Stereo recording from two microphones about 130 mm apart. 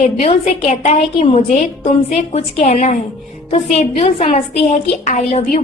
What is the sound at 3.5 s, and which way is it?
A woman's voice, 55° left (ahead or behind).